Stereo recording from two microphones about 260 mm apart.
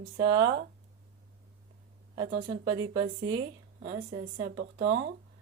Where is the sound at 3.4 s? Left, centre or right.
Right.